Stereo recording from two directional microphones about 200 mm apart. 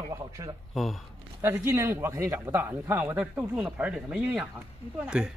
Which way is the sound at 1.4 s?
10° right (ahead or behind).